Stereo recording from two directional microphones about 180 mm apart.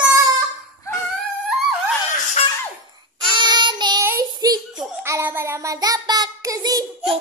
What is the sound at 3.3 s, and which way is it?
Child singing, 25° right (ahead or behind).